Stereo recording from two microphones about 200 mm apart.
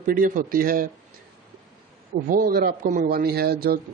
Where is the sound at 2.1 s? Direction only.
45° right (ahead or behind).